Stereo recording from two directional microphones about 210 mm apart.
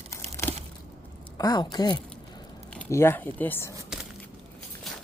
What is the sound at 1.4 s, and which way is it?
Speech, 20° left (ahead or behind).